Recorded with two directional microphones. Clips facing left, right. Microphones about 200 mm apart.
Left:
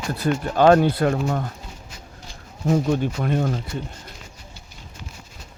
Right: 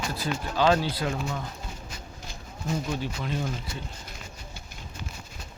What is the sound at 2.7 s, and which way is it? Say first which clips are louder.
Speech: left 10 dB; 55° left (ahead or behind).